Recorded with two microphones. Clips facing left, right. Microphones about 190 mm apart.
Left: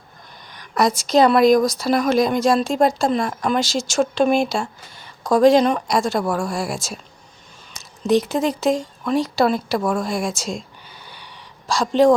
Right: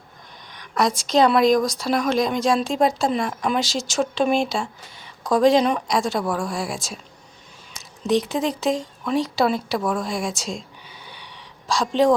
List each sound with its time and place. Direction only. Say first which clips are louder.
0.5 s speech: left 3 dB; 5° left (ahead or behind)